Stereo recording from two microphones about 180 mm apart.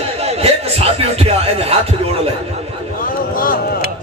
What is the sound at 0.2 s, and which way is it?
Music, 35° right (ahead or behind).